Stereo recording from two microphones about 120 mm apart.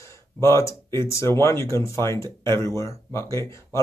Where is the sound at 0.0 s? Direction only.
20° left (ahead or behind).